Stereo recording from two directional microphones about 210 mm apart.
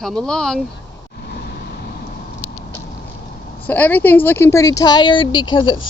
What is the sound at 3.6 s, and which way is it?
Speech, 10° left (ahead or behind).